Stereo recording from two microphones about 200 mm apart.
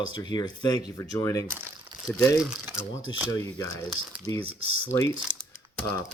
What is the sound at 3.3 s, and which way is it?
Speech, 15° left (ahead or behind).